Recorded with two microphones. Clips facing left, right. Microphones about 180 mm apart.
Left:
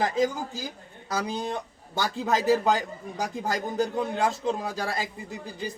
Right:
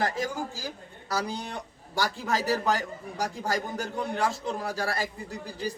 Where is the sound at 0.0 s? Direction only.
20° left (ahead or behind).